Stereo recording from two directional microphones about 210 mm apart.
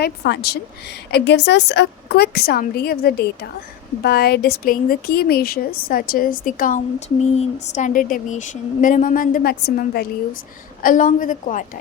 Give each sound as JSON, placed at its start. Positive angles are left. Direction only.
{"t": 0.0, "sound": "a woman's voice", "side_deg": 50}